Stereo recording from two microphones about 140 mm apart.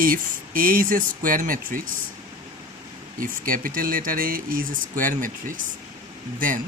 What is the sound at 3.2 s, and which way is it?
Speech, 80° right.